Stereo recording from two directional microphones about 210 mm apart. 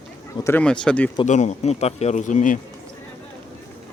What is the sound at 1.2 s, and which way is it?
Speech, 35° left (ahead or behind).